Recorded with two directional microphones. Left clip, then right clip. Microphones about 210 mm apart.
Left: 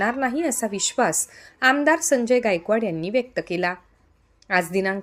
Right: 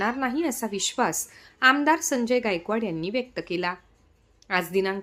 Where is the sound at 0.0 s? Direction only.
10° left (ahead or behind).